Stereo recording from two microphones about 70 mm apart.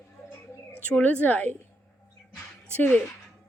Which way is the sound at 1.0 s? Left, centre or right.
Left.